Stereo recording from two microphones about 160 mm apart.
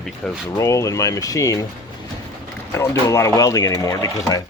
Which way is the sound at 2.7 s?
15° left (ahead or behind).